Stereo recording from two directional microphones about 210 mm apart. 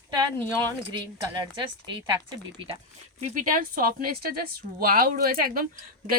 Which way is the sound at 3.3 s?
40° right (ahead or behind).